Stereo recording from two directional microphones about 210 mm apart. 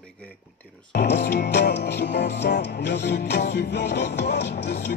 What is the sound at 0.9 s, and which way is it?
Music, 55° left (ahead or behind).